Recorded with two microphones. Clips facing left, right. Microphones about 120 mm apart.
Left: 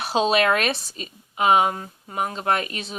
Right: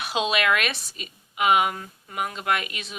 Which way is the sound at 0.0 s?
35° left (ahead or behind).